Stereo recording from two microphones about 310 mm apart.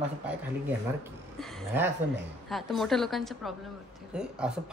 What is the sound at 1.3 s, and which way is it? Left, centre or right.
Speech, centre.